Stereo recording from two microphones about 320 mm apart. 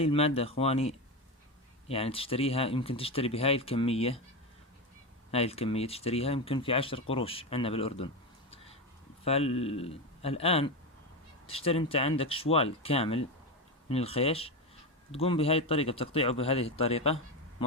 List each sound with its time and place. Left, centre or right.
0.0 s speech: centre
5.3 s speech: centre